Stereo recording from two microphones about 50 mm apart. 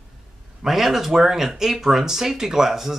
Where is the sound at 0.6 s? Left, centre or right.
Centre.